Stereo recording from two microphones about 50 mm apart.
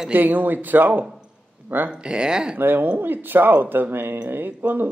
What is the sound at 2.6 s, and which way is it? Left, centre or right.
Speech, right.